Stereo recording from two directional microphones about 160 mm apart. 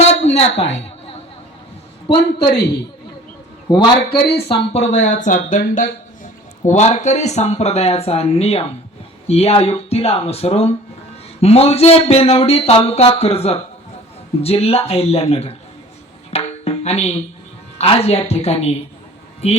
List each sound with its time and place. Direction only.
0.0 s a sound: 40° left (ahead or behind)
3.7 s a man's voice: 25° left (ahead or behind)
4.1 s speech: 85° left
4.4 s speech: 40° left (ahead or behind)
16.3 s music: 40° left (ahead or behind)
17.7 s speech: 40° left (ahead or behind)